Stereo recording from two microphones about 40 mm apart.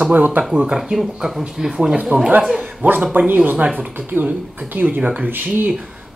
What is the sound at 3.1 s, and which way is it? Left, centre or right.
Speech, right.